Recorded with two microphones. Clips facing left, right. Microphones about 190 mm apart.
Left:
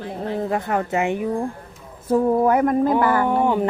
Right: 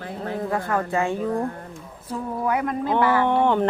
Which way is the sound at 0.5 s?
25° left (ahead or behind).